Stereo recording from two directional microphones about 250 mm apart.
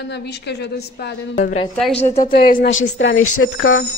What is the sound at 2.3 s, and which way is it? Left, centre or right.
Speech, left.